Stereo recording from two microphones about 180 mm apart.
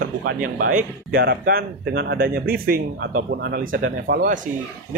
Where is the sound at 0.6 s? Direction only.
55° right (ahead or behind).